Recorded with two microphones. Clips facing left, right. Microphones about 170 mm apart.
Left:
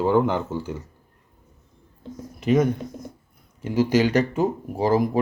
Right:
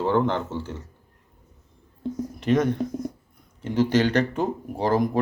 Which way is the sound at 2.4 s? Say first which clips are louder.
Left 2 dB; 10° left (ahead or behind).